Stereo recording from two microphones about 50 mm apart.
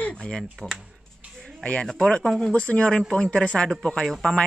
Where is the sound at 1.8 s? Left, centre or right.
Centre.